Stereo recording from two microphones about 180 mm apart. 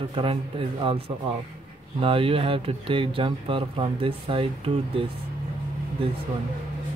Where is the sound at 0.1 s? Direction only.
30° right (ahead or behind).